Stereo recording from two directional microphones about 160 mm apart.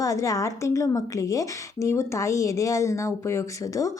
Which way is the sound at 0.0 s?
20° left (ahead or behind).